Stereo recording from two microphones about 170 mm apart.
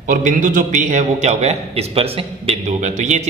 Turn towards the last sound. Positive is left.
turn(degrees=-45)  # may be behind; listen again after turning